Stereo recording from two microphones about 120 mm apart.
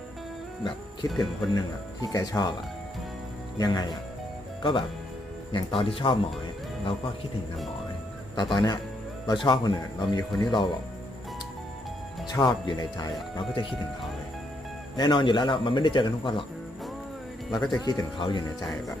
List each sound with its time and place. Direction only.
1.2 s speech: 35° left (ahead or behind)
3.6 s speech: 35° left (ahead or behind)
5.5 s speech: 50° left (ahead or behind)
8.4 s speech: 40° left (ahead or behind)
12.3 s speech: 35° left (ahead or behind)
14.9 s speech: 40° left (ahead or behind)
17.5 s speech: 35° left (ahead or behind)